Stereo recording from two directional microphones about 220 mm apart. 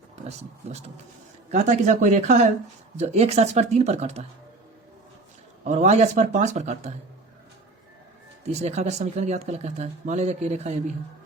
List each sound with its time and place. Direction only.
0.3 s speech: 30° right (ahead or behind)
5.6 s speech: 30° right (ahead or behind)
8.5 s speech: 30° right (ahead or behind)